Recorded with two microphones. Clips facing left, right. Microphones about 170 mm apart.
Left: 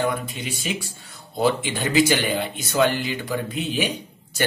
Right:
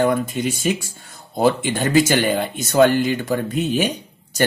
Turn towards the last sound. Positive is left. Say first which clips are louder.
# right 1 dB
turn(degrees=-45)  # may be behind; listen again after turning